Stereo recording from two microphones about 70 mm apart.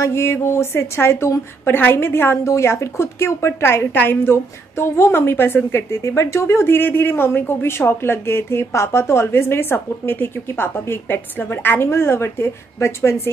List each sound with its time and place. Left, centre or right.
0.0 s a woman's voice: left